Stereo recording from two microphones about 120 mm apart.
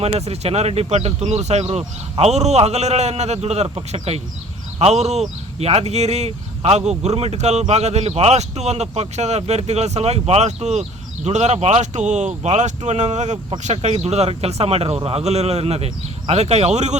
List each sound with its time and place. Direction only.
0.0 s speech: 60° right (ahead or behind)